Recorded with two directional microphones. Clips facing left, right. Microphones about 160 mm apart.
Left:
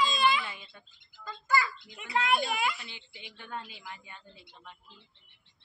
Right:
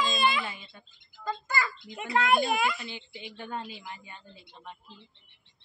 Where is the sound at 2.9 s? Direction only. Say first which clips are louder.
Right 8 dB; 30° right (ahead or behind).